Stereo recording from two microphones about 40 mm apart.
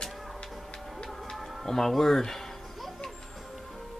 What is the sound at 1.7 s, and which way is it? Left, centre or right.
Speech, centre.